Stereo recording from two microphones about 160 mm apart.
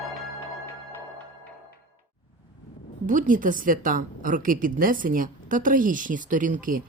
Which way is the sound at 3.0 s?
55° right (ahead or behind).